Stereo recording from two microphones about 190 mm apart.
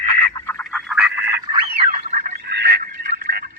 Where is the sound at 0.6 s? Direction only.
Centre (ahead or behind).